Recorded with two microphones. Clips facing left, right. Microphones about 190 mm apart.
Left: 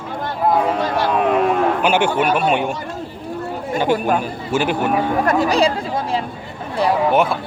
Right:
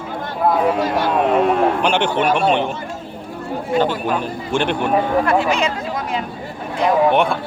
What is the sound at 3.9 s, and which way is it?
Speech, 45° left (ahead or behind).